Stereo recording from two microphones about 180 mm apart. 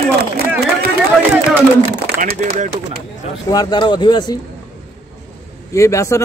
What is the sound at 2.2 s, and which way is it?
Speech, 45° right (ahead or behind).